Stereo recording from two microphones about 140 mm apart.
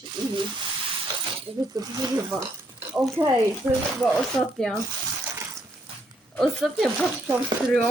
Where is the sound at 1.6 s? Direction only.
25° right (ahead or behind).